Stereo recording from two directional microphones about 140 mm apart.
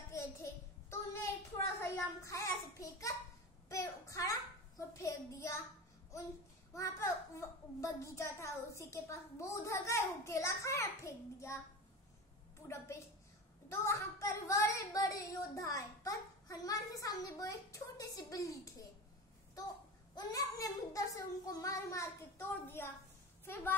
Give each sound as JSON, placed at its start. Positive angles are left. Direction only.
{"t": 0.1, "sound": "a sound", "side_deg": 20}
{"t": 6.7, "sound": "a child's voice", "side_deg": 20}
{"t": 12.6, "sound": "a child's voice", "side_deg": 20}
{"t": 20.2, "sound": "a child's voice", "side_deg": 25}